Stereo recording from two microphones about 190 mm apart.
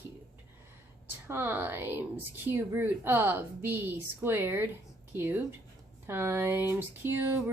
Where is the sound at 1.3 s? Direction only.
10° right (ahead or behind).